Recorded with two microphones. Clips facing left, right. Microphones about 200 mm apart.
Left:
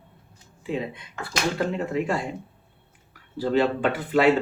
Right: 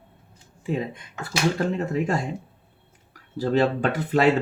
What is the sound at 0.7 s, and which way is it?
Speech, 45° right (ahead or behind).